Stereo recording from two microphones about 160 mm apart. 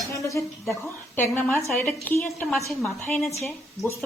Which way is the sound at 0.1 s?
20° left (ahead or behind).